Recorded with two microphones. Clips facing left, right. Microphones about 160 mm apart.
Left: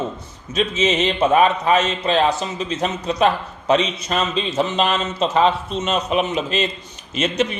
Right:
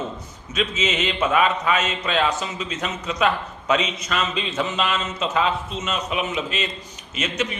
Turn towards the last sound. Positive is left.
turn(degrees=30)  # may be behind; listen again after turning